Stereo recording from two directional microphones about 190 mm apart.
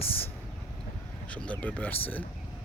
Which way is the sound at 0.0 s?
30° left (ahead or behind).